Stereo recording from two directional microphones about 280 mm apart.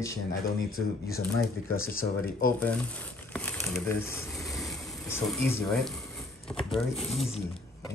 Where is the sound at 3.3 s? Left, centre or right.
Centre.